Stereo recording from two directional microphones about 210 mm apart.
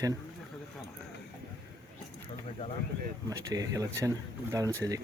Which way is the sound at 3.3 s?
15° right (ahead or behind).